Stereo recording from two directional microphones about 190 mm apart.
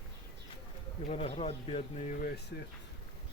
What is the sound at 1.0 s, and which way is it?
Speech, 30° left (ahead or behind).